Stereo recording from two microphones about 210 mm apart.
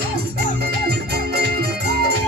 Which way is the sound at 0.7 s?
50° right (ahead or behind).